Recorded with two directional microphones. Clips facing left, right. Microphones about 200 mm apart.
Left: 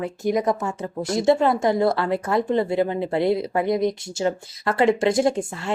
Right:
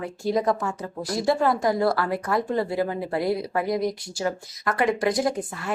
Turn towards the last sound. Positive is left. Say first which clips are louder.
# left 4 dB
turn(degrees=25)  # may be behind; listen again after turning